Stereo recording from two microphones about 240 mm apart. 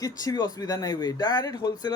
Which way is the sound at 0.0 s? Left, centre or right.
Centre.